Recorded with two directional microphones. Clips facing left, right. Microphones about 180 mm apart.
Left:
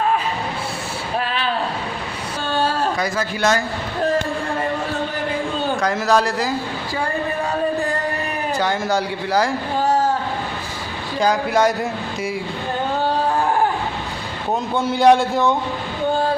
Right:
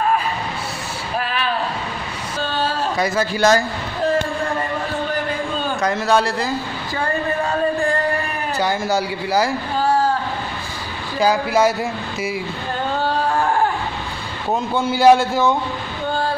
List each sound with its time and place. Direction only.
2.5 s a sound: 45° left (ahead or behind)
3.0 s a man's voice: 30° right (ahead or behind)
5.8 s a man's voice: 5° right (ahead or behind)
8.5 s a man's voice: 5° right (ahead or behind)
11.1 s a man's voice: 5° right (ahead or behind)
14.5 s a man's voice: centre (ahead or behind)